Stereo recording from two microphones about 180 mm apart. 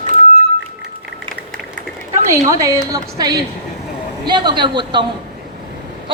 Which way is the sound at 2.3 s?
20° right (ahead or behind).